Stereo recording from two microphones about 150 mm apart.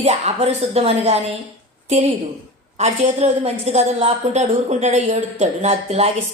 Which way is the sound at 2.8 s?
50° right (ahead or behind).